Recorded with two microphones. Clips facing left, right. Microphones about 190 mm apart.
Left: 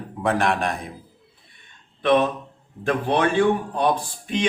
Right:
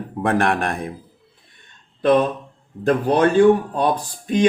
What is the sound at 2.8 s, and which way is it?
Speech, 40° right (ahead or behind).